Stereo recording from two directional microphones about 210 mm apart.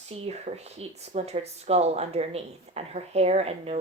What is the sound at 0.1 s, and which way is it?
Speech, 30° right (ahead or behind).